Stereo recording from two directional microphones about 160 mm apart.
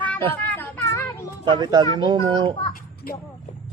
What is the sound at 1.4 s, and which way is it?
A man's voice, 25° right (ahead or behind).